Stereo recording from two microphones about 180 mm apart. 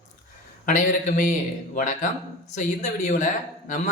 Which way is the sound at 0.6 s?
45° left (ahead or behind).